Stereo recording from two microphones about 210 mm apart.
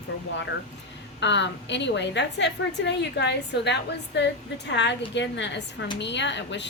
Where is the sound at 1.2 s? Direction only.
55° left (ahead or behind).